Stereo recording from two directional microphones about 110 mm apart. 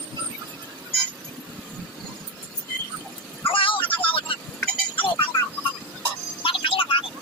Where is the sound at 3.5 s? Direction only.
50° left (ahead or behind).